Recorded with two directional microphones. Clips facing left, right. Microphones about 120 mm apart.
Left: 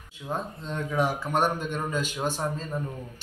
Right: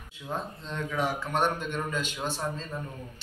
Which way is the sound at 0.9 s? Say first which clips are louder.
Left 3 dB; 40° left (ahead or behind).